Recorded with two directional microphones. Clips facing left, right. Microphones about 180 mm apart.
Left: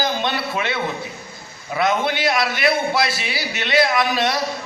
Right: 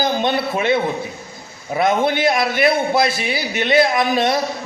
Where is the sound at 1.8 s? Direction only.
50° right (ahead or behind).